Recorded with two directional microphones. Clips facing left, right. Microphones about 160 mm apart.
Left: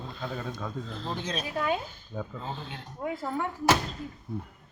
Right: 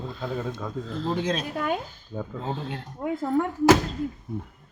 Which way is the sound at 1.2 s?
90° right.